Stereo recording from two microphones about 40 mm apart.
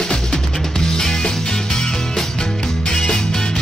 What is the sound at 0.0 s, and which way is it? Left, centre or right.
Music, centre.